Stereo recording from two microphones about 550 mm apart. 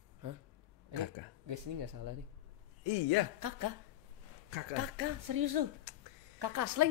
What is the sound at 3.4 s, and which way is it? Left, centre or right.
Speech, right.